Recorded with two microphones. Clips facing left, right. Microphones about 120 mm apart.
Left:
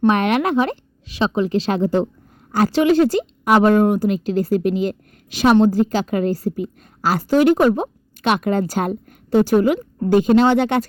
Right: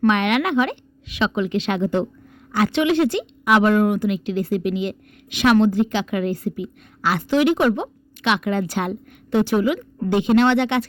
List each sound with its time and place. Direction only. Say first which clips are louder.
0.1 s speech: left 2 dB; 35° left (ahead or behind)